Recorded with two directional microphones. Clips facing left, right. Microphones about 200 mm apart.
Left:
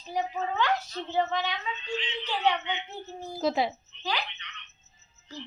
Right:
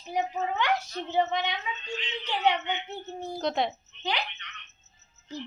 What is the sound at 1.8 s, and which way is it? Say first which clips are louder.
Speech: left 3 dB; 45° right (ahead or behind).